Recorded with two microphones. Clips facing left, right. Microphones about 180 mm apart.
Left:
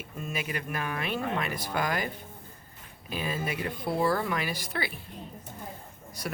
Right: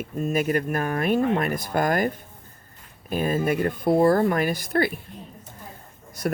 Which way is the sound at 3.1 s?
50° right (ahead or behind).